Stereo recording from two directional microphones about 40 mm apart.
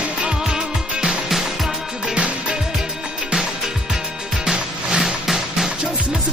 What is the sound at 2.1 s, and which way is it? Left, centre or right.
Music, right.